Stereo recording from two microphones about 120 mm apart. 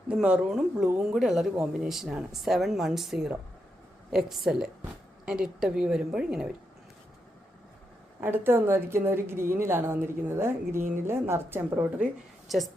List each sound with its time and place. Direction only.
0.1 s a woman's voice: 10° right (ahead or behind)
8.2 s a woman's voice: 20° right (ahead or behind)
12.5 s speech: centre (ahead or behind)